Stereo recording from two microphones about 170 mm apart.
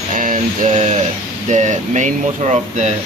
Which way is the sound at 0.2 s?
45° right (ahead or behind).